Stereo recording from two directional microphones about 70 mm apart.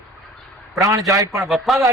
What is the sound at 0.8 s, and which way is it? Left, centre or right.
Speech, right.